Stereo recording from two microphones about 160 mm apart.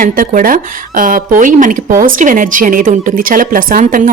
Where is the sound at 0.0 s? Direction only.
60° right (ahead or behind).